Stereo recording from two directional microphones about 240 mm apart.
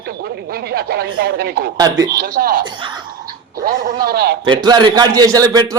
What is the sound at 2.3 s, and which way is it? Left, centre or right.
Speech, right.